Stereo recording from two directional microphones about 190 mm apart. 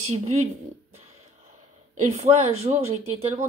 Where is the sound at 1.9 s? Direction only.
35° right (ahead or behind).